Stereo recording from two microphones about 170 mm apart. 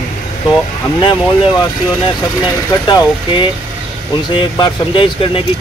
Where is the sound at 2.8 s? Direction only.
30° left (ahead or behind).